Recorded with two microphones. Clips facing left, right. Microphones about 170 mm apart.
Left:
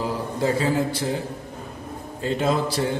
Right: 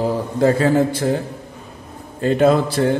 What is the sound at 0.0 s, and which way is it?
A man's voice, 55° right (ahead or behind).